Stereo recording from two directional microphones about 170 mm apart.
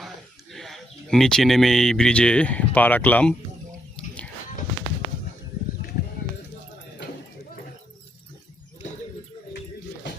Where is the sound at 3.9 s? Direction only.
5° left (ahead or behind).